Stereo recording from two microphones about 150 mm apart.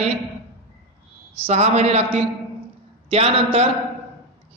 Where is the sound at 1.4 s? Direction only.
45° right (ahead or behind).